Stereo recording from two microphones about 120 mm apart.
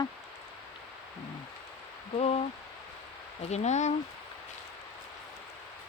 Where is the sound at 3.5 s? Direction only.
70° left (ahead or behind).